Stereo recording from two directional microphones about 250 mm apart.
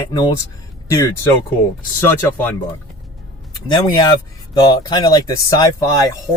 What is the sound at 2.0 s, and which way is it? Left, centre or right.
Speech, centre.